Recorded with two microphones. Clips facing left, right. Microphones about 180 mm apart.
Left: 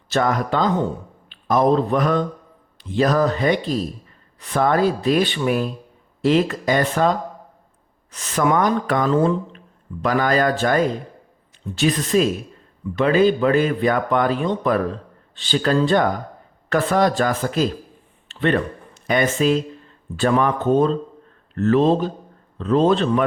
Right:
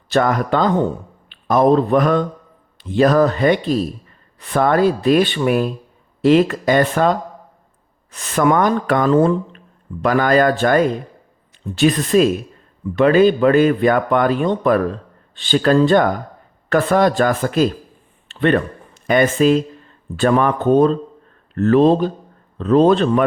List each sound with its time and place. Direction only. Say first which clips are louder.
0.1 s speech: right 3 dB; 60° right (ahead or behind)
8.1 s speech: right 3 dB; 55° right (ahead or behind)
18.3 s a sound: right 4 dB; 55° right (ahead or behind)
19.0 s a man's voice: right 4 dB; 55° right (ahead or behind)